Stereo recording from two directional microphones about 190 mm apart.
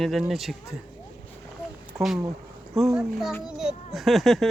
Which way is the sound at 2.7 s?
Centre (ahead or behind).